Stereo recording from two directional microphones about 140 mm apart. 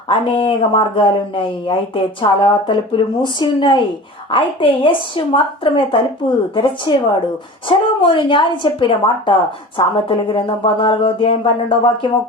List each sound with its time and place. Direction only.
0.1 s speech: 40° left (ahead or behind)